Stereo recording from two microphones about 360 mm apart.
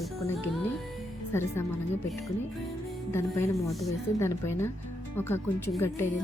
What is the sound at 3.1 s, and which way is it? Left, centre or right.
A woman's voice, centre.